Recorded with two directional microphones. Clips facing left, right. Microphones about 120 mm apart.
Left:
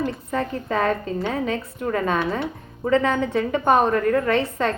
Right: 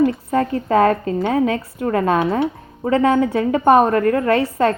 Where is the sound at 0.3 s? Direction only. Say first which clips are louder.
Right 7 dB; 45° right (ahead or behind).